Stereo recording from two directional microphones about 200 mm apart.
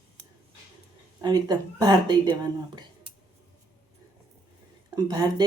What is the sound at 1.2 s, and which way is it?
Speech, 20° right (ahead or behind).